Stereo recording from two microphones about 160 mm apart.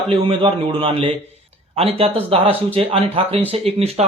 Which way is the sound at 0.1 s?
35° right (ahead or behind).